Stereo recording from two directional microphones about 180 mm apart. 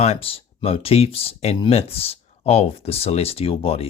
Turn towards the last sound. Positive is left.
turn(degrees=35)  # may be behind; listen again after turning